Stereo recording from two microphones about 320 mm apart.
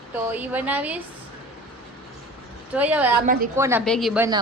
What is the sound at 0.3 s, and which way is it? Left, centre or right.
Speech, centre.